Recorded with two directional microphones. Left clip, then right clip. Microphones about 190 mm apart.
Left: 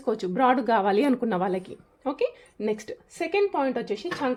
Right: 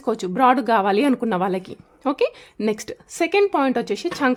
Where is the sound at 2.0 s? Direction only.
30° right (ahead or behind).